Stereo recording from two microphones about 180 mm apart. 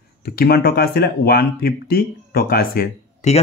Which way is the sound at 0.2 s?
60° left (ahead or behind).